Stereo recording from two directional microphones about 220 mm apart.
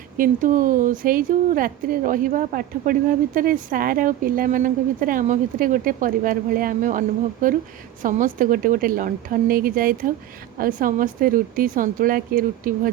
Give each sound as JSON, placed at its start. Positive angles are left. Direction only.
{"t": 0.2, "sound": "speech", "side_deg": -35}
{"t": 8.0, "sound": "speech", "side_deg": -35}